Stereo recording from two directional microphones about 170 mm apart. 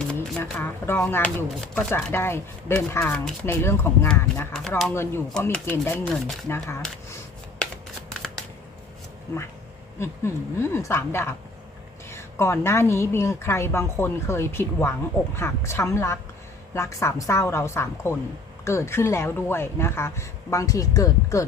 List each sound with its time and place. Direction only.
0.0 s speech: 5° left (ahead or behind)
9.3 s speech: 15° left (ahead or behind)